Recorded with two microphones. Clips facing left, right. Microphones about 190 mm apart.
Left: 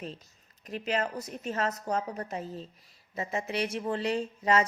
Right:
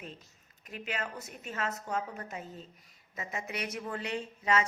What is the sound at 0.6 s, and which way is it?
A woman's voice, 35° left (ahead or behind).